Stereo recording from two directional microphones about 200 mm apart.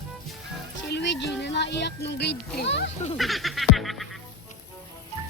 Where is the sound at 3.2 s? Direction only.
Centre (ahead or behind).